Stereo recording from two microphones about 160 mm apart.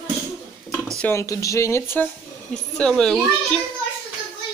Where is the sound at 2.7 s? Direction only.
5° left (ahead or behind).